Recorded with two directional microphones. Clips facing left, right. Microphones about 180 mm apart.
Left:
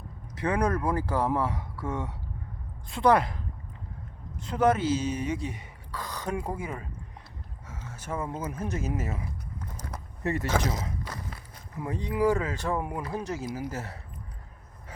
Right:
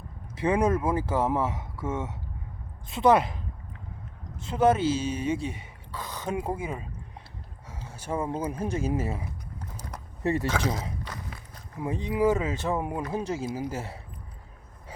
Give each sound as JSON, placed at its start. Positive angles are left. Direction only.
{"t": 0.3, "sound": "speech", "side_deg": -25}
{"t": 7.7, "sound": "a sound", "side_deg": -30}
{"t": 8.4, "sound": "speech", "side_deg": -30}
{"t": 10.7, "sound": "speech", "side_deg": -25}